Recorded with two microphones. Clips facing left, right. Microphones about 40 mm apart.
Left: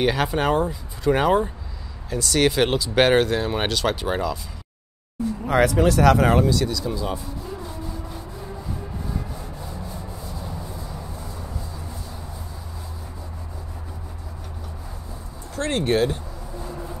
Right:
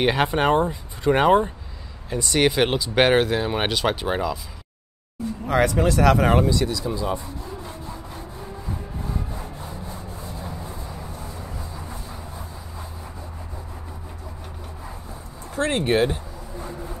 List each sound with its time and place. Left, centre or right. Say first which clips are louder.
0.0 s speech: right 1 dB; right
5.4 s speech: left 1 dB; centre
15.5 s speech: right 1 dB; centre